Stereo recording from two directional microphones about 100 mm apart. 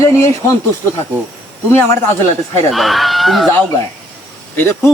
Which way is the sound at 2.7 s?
Centre (ahead or behind).